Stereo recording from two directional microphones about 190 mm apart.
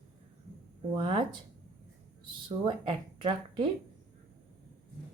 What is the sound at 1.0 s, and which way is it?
Speech, 25° right (ahead or behind).